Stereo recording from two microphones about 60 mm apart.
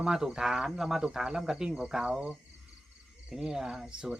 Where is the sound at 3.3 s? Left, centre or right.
Centre.